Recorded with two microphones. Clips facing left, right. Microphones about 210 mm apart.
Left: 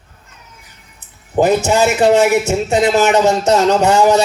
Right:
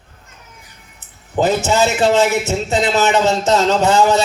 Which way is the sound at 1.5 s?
15° left (ahead or behind).